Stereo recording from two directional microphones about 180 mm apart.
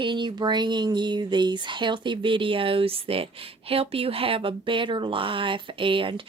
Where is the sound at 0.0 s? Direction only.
25° right (ahead or behind).